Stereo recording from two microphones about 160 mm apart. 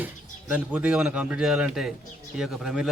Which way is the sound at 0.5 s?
10° right (ahead or behind).